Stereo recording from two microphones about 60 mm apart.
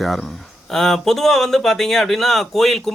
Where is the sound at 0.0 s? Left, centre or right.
Centre.